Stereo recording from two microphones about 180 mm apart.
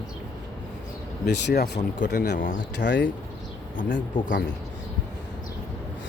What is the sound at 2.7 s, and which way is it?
Speech, 75° left (ahead or behind).